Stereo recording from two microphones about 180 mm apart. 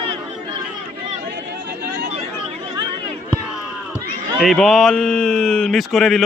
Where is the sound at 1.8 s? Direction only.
70° right (ahead or behind).